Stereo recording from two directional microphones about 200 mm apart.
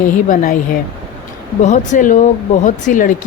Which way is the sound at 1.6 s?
40° left (ahead or behind).